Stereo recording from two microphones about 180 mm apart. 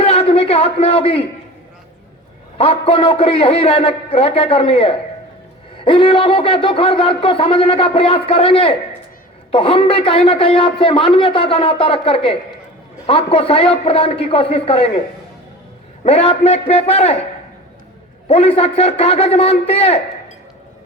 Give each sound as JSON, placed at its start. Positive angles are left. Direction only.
{"t": 0.0, "sound": "a man's voice", "side_deg": 35}
{"t": 2.6, "sound": "a man's voice", "side_deg": 30}
{"t": 16.0, "sound": "a man's voice", "side_deg": 35}
{"t": 18.3, "sound": "a man's voice", "side_deg": 30}